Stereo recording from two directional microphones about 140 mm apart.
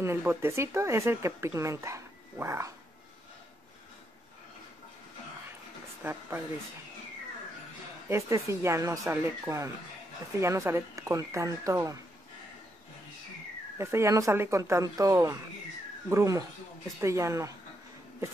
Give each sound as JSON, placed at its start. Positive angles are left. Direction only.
{"t": 0.0, "sound": "speech", "side_deg": -15}
{"t": 6.0, "sound": "speech", "side_deg": -15}
{"t": 8.1, "sound": "speech", "side_deg": -20}
{"t": 13.7, "sound": "speech", "side_deg": -20}